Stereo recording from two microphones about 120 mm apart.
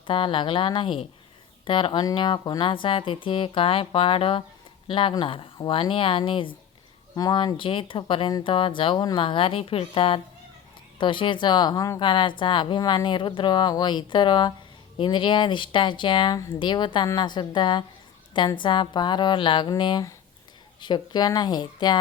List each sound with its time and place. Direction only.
0.1 s a woman's voice: 45° left (ahead or behind)